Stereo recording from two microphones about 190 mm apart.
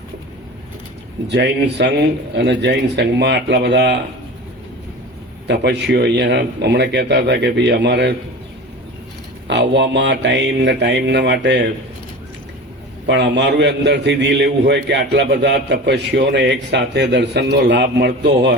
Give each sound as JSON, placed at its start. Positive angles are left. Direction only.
{"t": 1.3, "sound": "a man's voice", "side_deg": -65}
{"t": 5.5, "sound": "a man's voice", "side_deg": -60}
{"t": 9.5, "sound": "a man's voice", "side_deg": -65}
{"t": 13.1, "sound": "a man's voice", "side_deg": -65}